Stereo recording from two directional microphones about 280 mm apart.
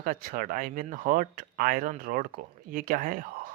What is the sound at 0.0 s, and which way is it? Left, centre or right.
Speech, right.